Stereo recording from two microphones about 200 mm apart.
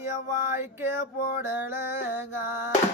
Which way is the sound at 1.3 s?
10° right (ahead or behind).